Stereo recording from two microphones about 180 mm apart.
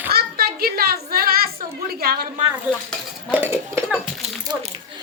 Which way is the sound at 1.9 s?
60° right (ahead or behind).